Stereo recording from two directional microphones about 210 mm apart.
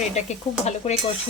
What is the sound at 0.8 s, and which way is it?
Speech, 30° left (ahead or behind).